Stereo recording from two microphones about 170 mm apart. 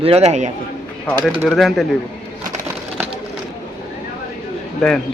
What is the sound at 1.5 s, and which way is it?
Speech, centre (ahead or behind).